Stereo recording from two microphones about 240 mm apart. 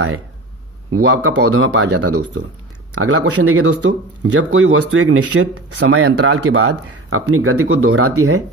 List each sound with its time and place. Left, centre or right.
0.9 s speech: right
2.9 s speech: right